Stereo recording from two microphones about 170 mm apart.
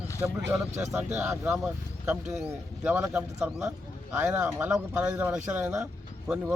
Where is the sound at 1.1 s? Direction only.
5° right (ahead or behind).